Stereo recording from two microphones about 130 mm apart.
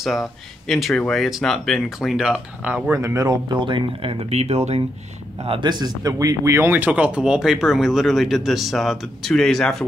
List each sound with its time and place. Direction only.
0.0 s speech: centre (ahead or behind)
2.9 s speech: 20° right (ahead or behind); by 4.6 s 55° right (ahead or behind)
5.4 s speech: 40° right (ahead or behind); by 9.8 s 5° left (ahead or behind)